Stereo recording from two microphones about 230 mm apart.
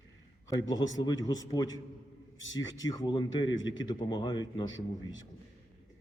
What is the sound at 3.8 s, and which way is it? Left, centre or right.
Speech, centre.